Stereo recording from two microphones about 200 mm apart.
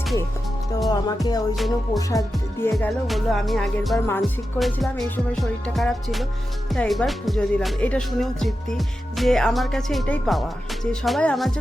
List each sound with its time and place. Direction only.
0.9 s music: 20° left (ahead or behind)
1.5 s music: centre (ahead or behind)
2.0 s speech: 15° left (ahead or behind)
2.7 s music: centre (ahead or behind)
3.9 s speech: 10° left (ahead or behind)
4.2 s music: centre (ahead or behind)